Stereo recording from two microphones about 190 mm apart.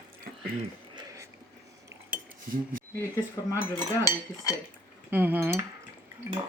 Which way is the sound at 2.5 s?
45° right (ahead or behind).